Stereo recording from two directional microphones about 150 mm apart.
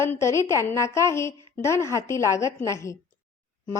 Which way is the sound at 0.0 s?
20° left (ahead or behind).